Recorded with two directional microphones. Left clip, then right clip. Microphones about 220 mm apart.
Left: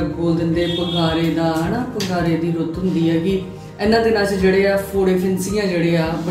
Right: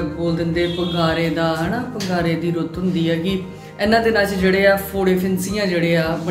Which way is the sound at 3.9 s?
15° right (ahead or behind).